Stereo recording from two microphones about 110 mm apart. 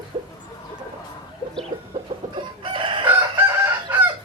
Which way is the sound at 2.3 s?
50° right (ahead or behind).